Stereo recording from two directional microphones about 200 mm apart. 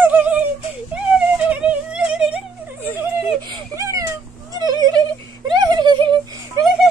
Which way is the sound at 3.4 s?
20° right (ahead or behind).